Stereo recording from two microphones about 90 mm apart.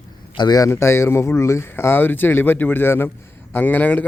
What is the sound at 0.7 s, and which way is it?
A man's voice, 30° left (ahead or behind).